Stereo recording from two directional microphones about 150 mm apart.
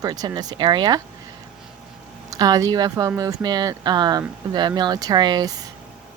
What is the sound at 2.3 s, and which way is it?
Speech, 25° right (ahead or behind).